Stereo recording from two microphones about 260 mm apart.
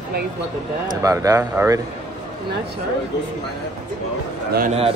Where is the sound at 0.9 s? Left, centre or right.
Centre.